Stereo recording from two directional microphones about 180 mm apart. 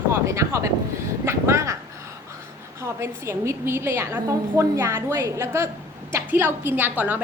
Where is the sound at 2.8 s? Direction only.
15° right (ahead or behind).